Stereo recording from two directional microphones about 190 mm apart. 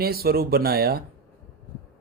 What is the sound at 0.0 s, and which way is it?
Speech, 55° right (ahead or behind).